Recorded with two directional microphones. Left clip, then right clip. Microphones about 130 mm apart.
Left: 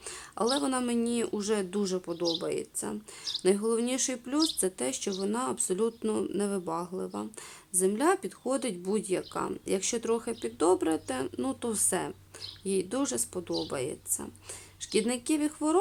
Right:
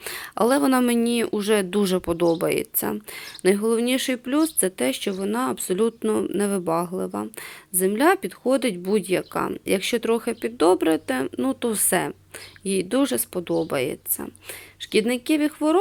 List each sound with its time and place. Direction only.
0.0 s speech: 30° right (ahead or behind)
14.8 s speech: 15° right (ahead or behind)